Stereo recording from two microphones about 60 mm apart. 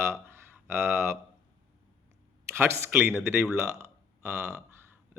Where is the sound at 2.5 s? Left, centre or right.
Right.